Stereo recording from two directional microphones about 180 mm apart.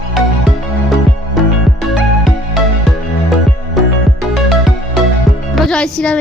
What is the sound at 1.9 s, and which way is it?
Music, centre (ahead or behind).